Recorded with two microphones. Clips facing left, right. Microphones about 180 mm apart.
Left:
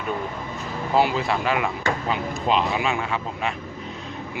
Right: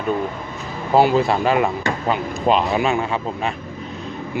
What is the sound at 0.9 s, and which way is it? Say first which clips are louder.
Speech: right 6 dB; 40° right (ahead or behind).